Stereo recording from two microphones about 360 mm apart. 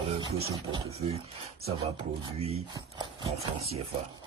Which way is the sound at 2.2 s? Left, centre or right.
Centre.